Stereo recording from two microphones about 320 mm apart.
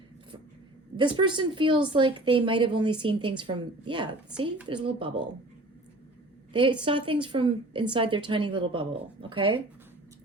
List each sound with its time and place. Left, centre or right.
0.9 s a woman's voice: centre
6.5 s a woman's voice: centre